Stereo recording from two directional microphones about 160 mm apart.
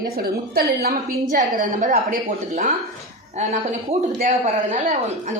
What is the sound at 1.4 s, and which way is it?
Speech, 55° right (ahead or behind).